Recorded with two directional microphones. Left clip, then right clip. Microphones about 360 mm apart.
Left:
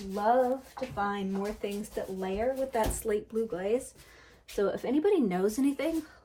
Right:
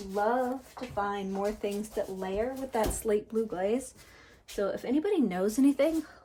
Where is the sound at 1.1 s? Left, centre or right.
Centre.